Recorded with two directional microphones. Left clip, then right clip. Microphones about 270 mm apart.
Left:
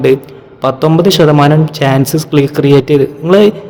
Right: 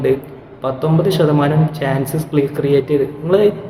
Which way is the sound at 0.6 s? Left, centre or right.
Left.